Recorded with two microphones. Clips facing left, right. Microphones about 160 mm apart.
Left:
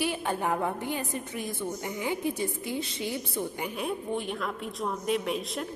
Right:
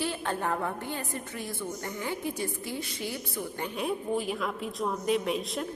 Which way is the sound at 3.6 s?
Centre (ahead or behind).